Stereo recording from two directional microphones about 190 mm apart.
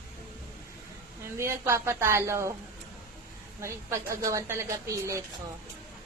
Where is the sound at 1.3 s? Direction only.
15° right (ahead or behind).